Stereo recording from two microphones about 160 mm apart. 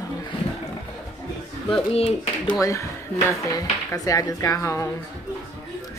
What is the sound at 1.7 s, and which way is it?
Speech, 40° left (ahead or behind).